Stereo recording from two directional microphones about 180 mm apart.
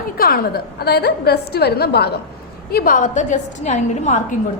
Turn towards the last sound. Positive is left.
turn(degrees=40)  # may be behind; listen again after turning